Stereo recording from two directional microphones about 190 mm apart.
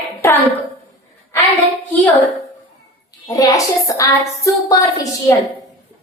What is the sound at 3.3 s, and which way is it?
Speech, 20° left (ahead or behind).